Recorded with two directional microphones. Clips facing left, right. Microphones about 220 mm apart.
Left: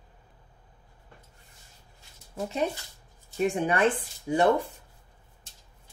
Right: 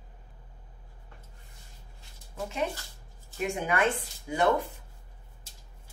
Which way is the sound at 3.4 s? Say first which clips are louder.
Left 4 dB; 30° left (ahead or behind).